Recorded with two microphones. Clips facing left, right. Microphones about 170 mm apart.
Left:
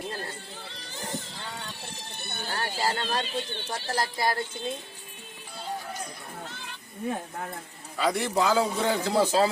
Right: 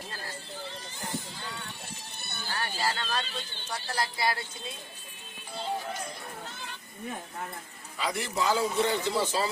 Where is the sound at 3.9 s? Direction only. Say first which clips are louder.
Left 3 dB; 45° left (ahead or behind).